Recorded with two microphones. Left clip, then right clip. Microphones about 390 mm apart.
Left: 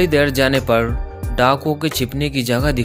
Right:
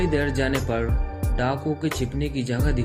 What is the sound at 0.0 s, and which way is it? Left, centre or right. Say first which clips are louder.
Speech: left 9 dB; left.